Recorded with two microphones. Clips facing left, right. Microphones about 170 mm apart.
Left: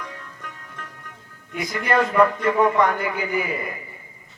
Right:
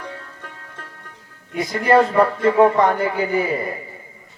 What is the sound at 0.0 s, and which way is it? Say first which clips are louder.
Music: right 2 dB; 30° right (ahead or behind).